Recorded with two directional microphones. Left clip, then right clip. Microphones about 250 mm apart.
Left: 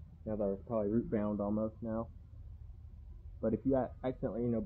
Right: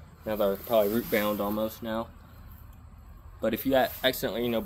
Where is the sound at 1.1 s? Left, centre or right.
Centre.